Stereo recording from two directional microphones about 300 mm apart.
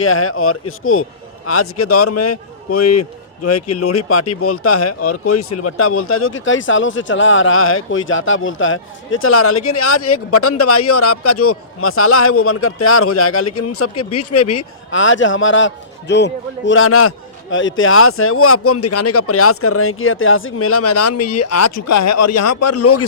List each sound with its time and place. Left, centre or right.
0.0 s a man's voice: left